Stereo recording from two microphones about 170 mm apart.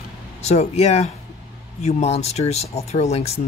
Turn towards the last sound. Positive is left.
turn(degrees=40)  # may be behind; listen again after turning